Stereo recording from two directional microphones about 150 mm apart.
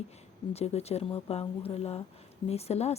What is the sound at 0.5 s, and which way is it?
Speech, 45° left (ahead or behind).